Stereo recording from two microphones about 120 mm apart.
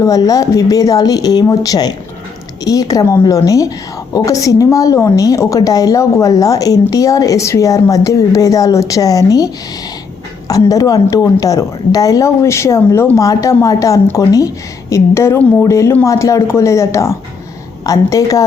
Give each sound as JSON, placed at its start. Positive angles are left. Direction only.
{"t": 0.0, "sound": "a woman's voice", "side_deg": 30}
{"t": 10.5, "sound": "a woman's voice", "side_deg": 30}